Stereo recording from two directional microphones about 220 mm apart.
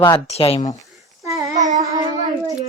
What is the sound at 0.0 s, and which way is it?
Speech, 25° left (ahead or behind).